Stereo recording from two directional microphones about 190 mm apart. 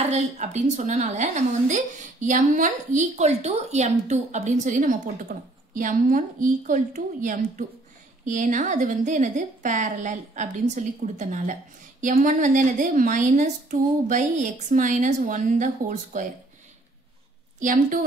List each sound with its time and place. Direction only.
0.1 s a woman's voice: 35° right (ahead or behind)
17.6 s a woman's voice: 45° right (ahead or behind)